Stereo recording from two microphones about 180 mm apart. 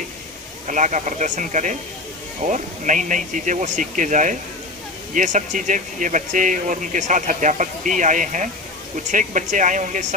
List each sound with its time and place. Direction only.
0.7 s speech: 45° right (ahead or behind)